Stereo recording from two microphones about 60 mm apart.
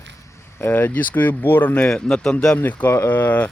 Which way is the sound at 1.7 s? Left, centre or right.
Centre.